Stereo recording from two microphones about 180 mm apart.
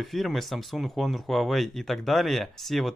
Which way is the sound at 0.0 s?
Centre (ahead or behind).